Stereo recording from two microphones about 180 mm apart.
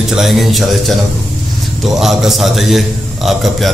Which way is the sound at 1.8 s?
Centre (ahead or behind).